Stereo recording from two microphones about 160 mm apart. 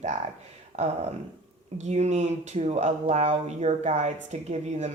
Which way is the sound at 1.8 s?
45° right (ahead or behind).